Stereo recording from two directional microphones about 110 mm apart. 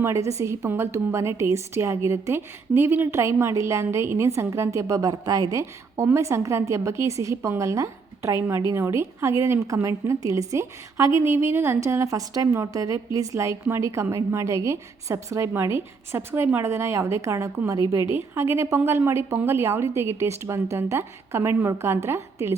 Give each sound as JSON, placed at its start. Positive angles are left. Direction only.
{"t": 0.0, "sound": "a woman's voice", "side_deg": -25}